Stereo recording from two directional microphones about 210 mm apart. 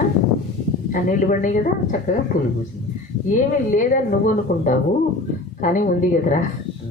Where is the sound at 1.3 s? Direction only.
40° left (ahead or behind).